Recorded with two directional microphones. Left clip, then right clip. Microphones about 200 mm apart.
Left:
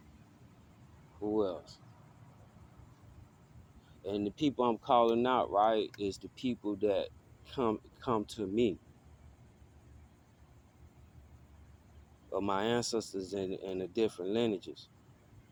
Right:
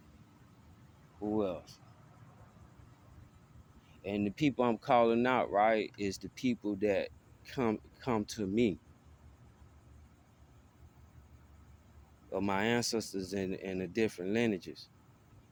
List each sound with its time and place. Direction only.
1.2 s speech: 40° right (ahead or behind)
4.4 s speech: 45° right (ahead or behind)
12.3 s speech: 40° right (ahead or behind)